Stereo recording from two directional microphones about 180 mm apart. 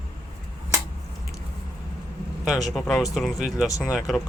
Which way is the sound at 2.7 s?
Centre (ahead or behind).